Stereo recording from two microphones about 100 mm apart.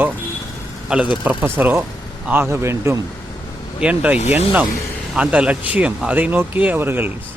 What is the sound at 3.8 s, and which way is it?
Speech, 15° right (ahead or behind).